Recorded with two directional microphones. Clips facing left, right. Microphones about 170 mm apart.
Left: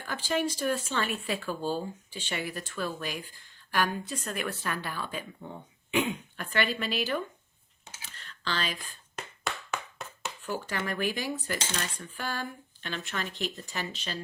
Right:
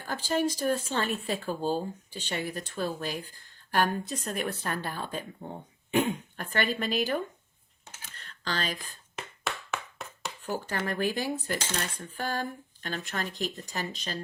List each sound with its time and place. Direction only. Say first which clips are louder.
0.3 s speech: right 2 dB; 45° right (ahead or behind)
3.7 s cutlery: right 2 dB; 45° right (ahead or behind)
4.3 s speech: right 1 dB; 40° right (ahead or behind)
6.3 s cutlery: even; 45° right (ahead or behind)
8.1 s a sound: even; 40° right (ahead or behind)
9.7 s a sound: even; centre (ahead or behind)
10.4 s cutlery: right 1 dB; 40° right (ahead or behind)